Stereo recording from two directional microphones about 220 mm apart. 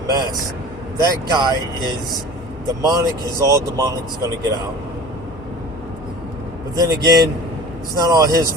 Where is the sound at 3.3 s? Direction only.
15° right (ahead or behind).